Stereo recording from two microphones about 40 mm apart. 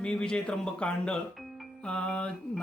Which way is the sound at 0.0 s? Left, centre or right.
Centre.